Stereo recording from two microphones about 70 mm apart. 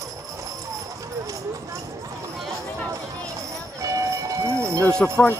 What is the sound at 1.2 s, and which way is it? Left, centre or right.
Clip-clop, right.